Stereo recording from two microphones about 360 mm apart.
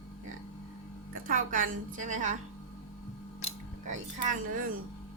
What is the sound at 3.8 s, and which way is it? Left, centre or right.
Speech, right.